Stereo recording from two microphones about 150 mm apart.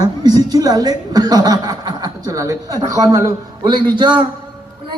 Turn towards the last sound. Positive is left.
turn(degrees=-30)  # may be behind; listen again after turning